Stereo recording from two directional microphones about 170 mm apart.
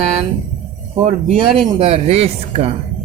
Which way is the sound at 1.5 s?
Centre (ahead or behind).